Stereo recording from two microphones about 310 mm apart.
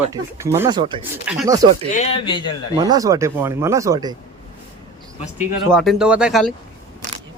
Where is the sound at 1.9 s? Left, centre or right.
Centre.